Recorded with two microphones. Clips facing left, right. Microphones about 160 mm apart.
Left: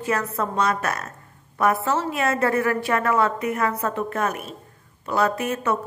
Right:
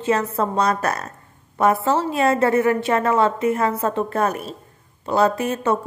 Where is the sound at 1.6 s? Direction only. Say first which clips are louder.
Right 3 dB; 25° right (ahead or behind).